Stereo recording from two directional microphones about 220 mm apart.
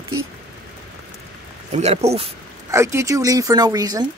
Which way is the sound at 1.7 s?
30° right (ahead or behind).